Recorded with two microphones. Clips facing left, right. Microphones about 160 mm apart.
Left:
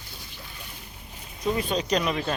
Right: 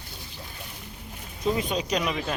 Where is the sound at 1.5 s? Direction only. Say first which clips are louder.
Left 1 dB; 10° right (ahead or behind).